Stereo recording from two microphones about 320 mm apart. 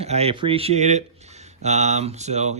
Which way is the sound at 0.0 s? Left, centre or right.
Centre.